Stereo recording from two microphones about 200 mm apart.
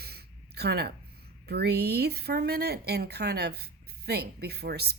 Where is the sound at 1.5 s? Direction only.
55° right (ahead or behind).